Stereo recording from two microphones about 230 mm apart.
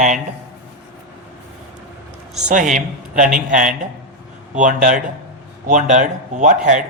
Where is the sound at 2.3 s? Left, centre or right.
Right.